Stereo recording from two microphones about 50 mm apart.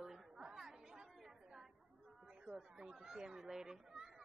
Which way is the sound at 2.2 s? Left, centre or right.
Centre.